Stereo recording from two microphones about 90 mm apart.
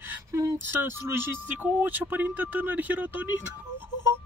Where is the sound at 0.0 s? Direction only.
25° right (ahead or behind).